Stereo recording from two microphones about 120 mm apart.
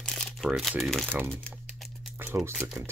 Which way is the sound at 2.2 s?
15° right (ahead or behind).